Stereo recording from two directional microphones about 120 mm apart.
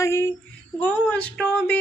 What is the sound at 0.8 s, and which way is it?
Speech, 10° left (ahead or behind).